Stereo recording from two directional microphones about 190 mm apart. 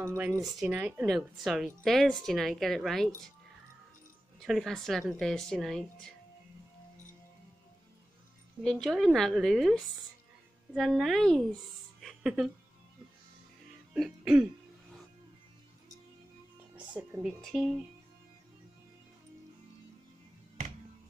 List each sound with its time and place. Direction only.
0.0 s speech: 15° right (ahead or behind)
0.4 s speech: centre (ahead or behind)
4.4 s speech: centre (ahead or behind)
8.6 s speech: centre (ahead or behind)
12.0 s music: centre (ahead or behind)
13.9 s speech: centre (ahead or behind)
16.7 s speech: 5° right (ahead or behind)